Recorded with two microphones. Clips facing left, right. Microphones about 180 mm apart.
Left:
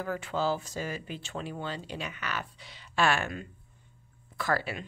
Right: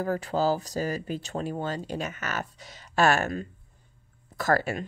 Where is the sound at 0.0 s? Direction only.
40° right (ahead or behind).